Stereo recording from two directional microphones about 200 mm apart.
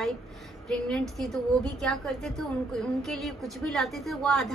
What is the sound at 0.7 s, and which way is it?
A woman's voice, 5° left (ahead or behind).